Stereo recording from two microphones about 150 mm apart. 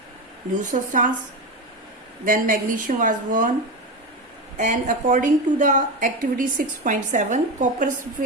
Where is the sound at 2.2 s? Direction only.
65° right (ahead or behind).